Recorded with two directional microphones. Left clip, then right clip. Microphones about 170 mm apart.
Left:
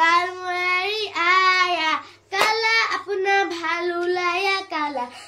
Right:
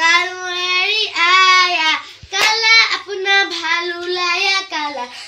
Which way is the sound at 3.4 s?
25° left (ahead or behind).